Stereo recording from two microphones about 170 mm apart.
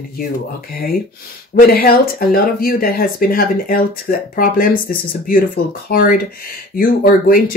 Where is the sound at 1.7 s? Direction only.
60° left (ahead or behind).